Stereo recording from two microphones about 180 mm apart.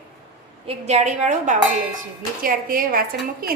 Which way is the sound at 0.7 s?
35° right (ahead or behind).